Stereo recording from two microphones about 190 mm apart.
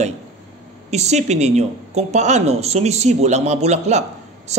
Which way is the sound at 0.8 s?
35° right (ahead or behind).